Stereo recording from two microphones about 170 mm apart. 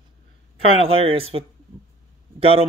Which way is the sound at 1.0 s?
35° right (ahead or behind).